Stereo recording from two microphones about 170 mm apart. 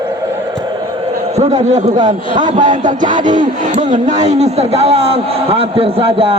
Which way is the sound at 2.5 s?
50° right (ahead or behind).